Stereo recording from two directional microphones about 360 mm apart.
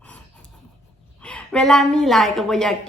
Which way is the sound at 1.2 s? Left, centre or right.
Centre.